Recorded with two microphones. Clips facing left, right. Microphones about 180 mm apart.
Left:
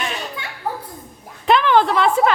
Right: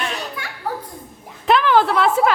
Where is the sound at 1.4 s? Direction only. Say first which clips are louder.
Even; centre (ahead or behind).